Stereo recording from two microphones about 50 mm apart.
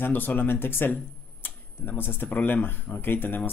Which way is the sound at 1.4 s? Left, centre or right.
Left.